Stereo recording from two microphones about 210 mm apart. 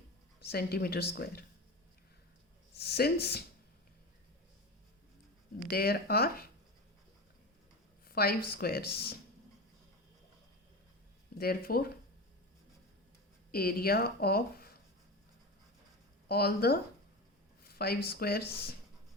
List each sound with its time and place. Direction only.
0.3 s speech: 50° left (ahead or behind)
2.7 s speech: 50° left (ahead or behind)
5.7 s speech: 45° left (ahead or behind)
8.0 s speech: 45° left (ahead or behind)
11.3 s speech: 45° left (ahead or behind)
13.5 s speech: 45° left (ahead or behind)
16.3 s speech: 50° left (ahead or behind)